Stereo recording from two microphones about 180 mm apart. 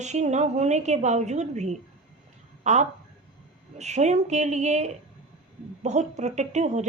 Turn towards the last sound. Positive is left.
turn(degrees=-40)  # may be behind; listen again after turning